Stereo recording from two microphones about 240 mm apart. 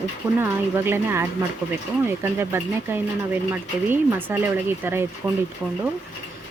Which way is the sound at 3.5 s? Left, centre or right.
Centre.